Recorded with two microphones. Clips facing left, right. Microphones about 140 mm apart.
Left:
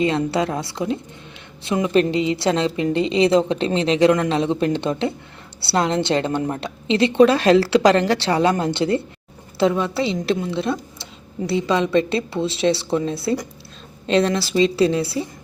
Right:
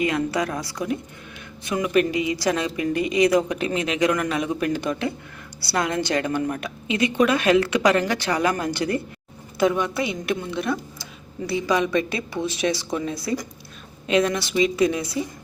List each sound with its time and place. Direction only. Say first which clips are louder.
0.0 s a woman's voice: left 3 dB; 25° left (ahead or behind)